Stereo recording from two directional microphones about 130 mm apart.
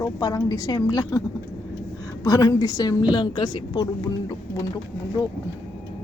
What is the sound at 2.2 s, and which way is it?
A woman's voice, 30° left (ahead or behind).